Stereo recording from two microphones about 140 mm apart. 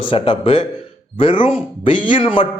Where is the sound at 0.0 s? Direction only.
40° left (ahead or behind).